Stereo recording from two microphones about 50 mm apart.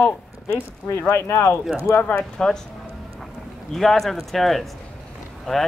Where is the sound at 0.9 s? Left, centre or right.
Left.